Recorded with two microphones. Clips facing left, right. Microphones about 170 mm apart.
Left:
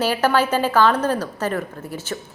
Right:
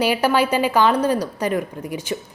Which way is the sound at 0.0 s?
10° right (ahead or behind).